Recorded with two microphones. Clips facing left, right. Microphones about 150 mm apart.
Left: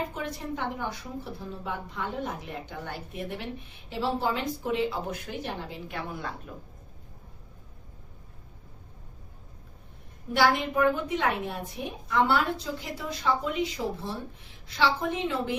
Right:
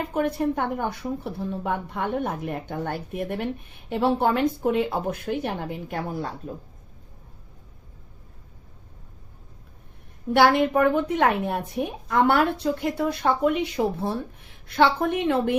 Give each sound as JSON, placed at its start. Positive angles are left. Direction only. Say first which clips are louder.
{"t": 0.1, "sound": "speech", "louder": "right 11 dB", "side_deg": -60}
{"t": 10.3, "sound": "speech", "louder": "right 6 dB", "side_deg": -60}